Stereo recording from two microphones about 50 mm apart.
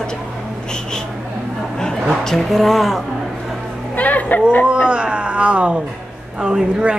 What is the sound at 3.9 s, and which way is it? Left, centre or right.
Chatter, left.